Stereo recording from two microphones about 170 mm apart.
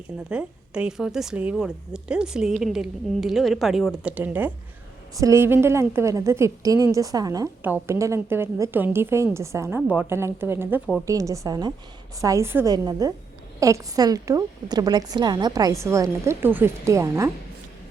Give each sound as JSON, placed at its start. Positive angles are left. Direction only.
{"t": 0.3, "sound": "a woman's voice", "side_deg": -5}